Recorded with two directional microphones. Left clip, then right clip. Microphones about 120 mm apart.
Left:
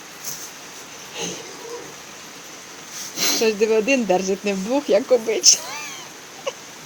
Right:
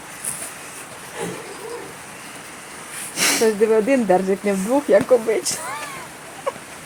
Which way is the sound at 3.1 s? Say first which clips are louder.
Right 2 dB; 10° right (ahead or behind).